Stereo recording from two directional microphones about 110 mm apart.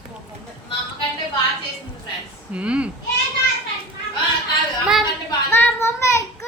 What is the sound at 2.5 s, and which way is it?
Speech, 10° right (ahead or behind).